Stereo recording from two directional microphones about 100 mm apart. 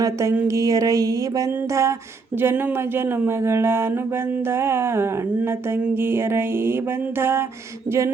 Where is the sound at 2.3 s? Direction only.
20° right (ahead or behind).